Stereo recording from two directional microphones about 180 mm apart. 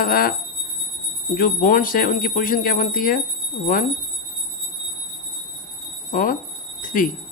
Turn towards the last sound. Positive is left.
turn(degrees=50)  # may be behind; listen again after turning